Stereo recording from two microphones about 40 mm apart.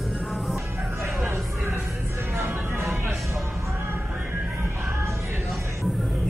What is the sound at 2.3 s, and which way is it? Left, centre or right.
Music, right.